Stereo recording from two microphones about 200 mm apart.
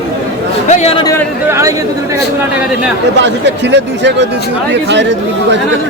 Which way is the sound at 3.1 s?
60° right (ahead or behind).